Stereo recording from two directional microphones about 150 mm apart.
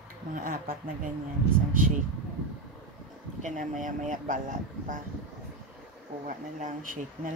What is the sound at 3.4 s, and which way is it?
Speech, 60° right (ahead or behind).